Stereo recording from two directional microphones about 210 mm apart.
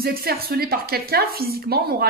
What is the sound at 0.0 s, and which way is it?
Speech, 45° right (ahead or behind).